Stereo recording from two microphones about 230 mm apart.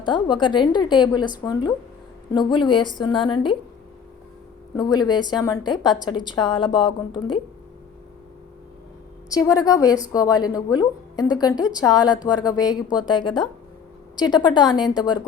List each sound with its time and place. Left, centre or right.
0.0 s a woman's voice: centre
4.8 s a woman's voice: centre
9.5 s a woman's voice: centre